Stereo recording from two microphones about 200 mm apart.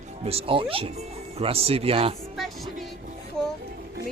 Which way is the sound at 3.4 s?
5° left (ahead or behind).